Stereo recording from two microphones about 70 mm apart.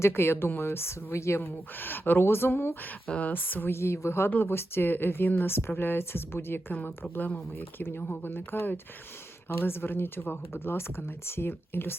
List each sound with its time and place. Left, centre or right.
0.0 s speech: left
1.7 s speech: left
3.1 s speech: left